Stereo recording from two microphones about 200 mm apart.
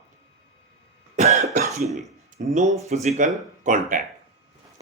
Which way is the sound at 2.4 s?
45° right (ahead or behind).